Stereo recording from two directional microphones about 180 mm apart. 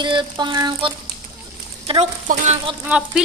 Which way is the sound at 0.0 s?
25° right (ahead or behind).